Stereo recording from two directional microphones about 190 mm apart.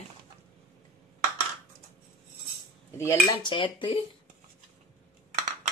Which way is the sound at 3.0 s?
20° left (ahead or behind).